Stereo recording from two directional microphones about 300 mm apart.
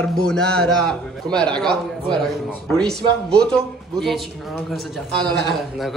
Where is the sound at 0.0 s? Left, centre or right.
Centre.